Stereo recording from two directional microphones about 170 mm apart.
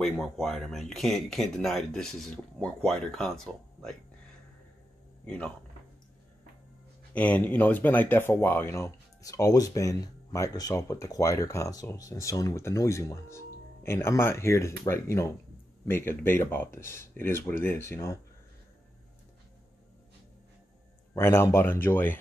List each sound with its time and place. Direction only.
0.0 s speech: centre (ahead or behind)
5.2 s speech: 5° left (ahead or behind)
7.2 s speech: 10° left (ahead or behind)
21.1 s speech: 15° left (ahead or behind)